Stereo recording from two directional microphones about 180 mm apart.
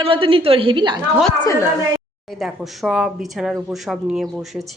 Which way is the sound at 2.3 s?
Centre (ahead or behind).